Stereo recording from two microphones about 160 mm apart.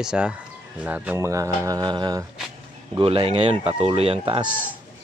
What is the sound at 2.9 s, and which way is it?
Speech, 35° right (ahead or behind).